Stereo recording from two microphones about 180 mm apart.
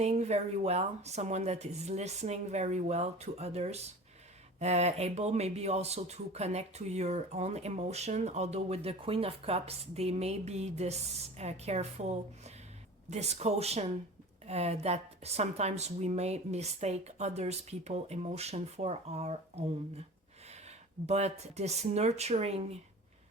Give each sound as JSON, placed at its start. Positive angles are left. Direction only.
{"t": 0.0, "sound": "speech", "side_deg": -35}